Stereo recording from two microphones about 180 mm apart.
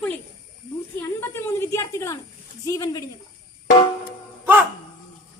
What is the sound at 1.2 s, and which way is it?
Speech, 15° left (ahead or behind).